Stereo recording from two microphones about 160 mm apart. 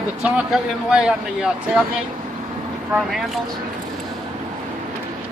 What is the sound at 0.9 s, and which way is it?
Speech, 5° right (ahead or behind).